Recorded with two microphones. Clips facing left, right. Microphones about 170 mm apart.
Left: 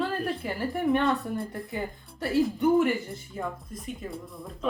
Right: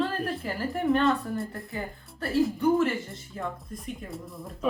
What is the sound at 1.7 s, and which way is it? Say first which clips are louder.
Speech: left 2 dB; 20° left (ahead or behind).